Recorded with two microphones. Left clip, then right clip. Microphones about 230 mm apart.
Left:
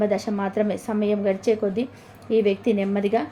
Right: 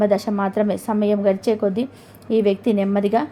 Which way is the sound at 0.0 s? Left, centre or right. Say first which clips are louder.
Right 5 dB; right.